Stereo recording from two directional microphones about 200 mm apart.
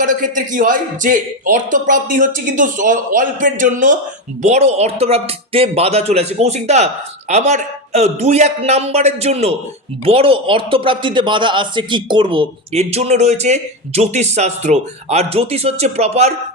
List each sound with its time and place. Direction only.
0.0 s a man's voice: 40° right (ahead or behind)